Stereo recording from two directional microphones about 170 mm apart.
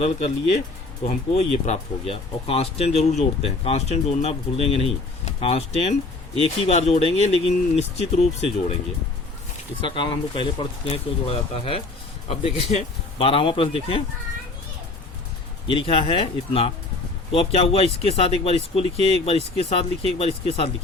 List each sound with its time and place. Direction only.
0.0 s speech: 40° left (ahead or behind)
9.8 s speech: 30° left (ahead or behind)
15.6 s speech: 30° left (ahead or behind)